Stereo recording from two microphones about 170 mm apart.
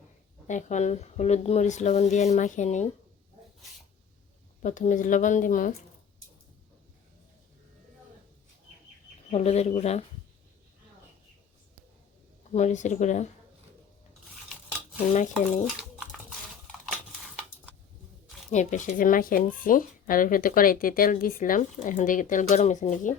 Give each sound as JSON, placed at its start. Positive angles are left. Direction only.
{"t": 0.4, "sound": "speech", "side_deg": 45}
{"t": 4.6, "sound": "speech", "side_deg": 45}
{"t": 9.3, "sound": "speech", "side_deg": 40}
{"t": 12.5, "sound": "speech", "side_deg": 45}
{"t": 18.5, "sound": "speech", "side_deg": 45}